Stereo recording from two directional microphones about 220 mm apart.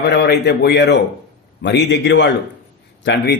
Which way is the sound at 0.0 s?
50° left (ahead or behind).